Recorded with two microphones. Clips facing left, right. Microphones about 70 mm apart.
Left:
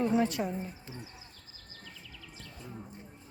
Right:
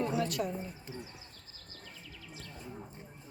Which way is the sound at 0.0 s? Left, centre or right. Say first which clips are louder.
Left 4 dB; left.